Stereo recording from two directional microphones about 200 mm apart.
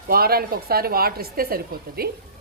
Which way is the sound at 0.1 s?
50° right (ahead or behind).